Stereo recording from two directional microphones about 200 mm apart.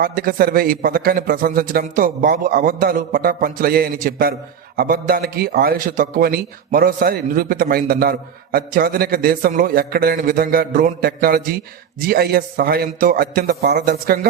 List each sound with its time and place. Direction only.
0.0 s a man's voice: 45° right (ahead or behind)